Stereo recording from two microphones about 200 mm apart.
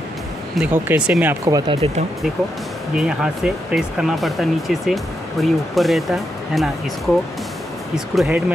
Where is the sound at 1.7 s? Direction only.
30° right (ahead or behind).